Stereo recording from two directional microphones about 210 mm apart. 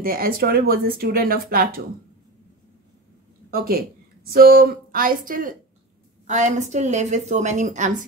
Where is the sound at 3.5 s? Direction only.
45° right (ahead or behind).